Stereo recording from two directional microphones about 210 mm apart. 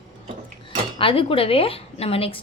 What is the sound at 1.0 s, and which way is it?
A woman's voice, 25° left (ahead or behind).